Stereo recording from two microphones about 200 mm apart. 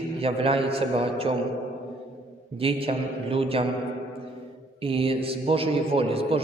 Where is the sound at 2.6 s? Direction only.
30° right (ahead or behind).